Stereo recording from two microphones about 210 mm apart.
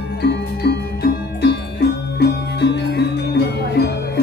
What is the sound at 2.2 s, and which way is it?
Music, 50° left (ahead or behind).